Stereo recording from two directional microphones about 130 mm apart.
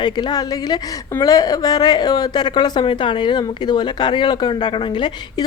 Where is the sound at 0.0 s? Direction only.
35° left (ahead or behind).